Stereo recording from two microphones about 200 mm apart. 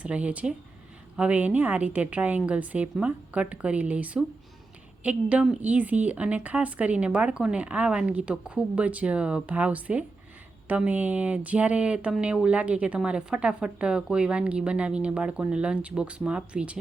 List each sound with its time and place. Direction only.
0.0 s a woman's voice: 5° right (ahead or behind)